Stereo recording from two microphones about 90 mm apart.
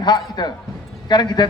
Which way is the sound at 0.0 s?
55° left (ahead or behind).